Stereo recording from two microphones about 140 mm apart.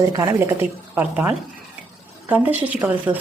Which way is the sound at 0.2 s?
20° right (ahead or behind).